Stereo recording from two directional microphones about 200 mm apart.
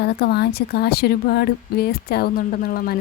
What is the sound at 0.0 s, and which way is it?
A woman's voice, 55° left (ahead or behind).